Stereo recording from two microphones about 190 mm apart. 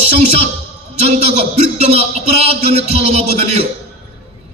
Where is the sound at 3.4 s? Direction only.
35° right (ahead or behind).